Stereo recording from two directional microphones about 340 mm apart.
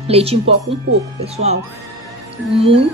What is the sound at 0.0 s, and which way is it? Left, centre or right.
A woman's voice, centre.